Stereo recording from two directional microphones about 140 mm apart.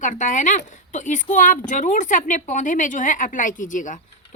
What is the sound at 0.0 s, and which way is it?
Speech, 65° left (ahead or behind).